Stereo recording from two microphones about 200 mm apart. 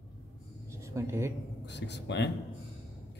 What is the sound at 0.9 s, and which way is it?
Speech, 15° right (ahead or behind).